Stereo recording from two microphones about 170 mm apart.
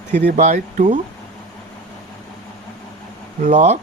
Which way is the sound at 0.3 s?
45° right (ahead or behind).